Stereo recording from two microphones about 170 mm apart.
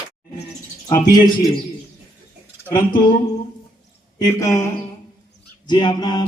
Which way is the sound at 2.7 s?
30° left (ahead or behind).